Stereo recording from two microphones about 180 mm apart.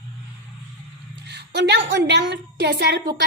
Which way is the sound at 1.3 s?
70° right (ahead or behind).